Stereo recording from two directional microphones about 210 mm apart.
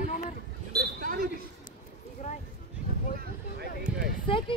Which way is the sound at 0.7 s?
45° right (ahead or behind).